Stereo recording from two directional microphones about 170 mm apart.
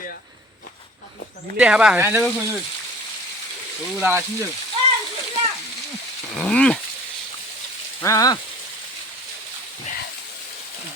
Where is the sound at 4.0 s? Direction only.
15° right (ahead or behind).